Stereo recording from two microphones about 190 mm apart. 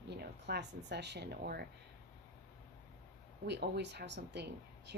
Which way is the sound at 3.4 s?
65° right (ahead or behind).